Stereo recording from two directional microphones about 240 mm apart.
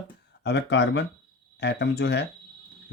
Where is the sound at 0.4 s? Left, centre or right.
Left.